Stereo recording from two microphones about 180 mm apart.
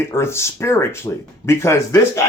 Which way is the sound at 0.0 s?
15° left (ahead or behind).